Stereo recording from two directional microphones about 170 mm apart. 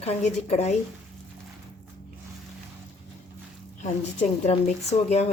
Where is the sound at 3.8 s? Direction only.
40° left (ahead or behind).